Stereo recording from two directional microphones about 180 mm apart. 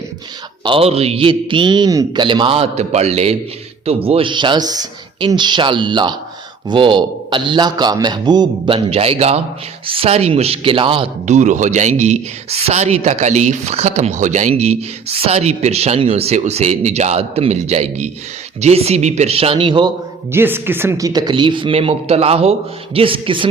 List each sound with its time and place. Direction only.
0.6 s a man's voice: 30° right (ahead or behind)
11.3 s a man's voice: 40° right (ahead or behind)
20.3 s a man's voice: 10° right (ahead or behind); by 23.5 s 30° right (ahead or behind)